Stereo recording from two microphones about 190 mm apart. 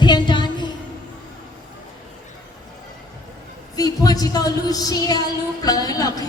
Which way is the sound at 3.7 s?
20° left (ahead or behind).